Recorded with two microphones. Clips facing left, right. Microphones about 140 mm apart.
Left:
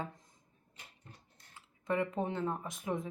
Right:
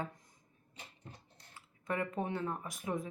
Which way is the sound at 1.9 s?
25° left (ahead or behind).